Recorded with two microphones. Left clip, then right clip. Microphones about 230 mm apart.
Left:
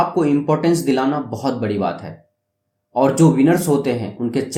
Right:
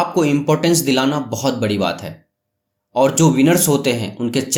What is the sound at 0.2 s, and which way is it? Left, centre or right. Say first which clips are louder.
Speech: right 1 dB; right.